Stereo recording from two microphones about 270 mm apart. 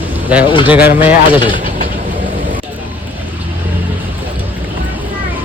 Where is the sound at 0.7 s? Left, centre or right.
Centre.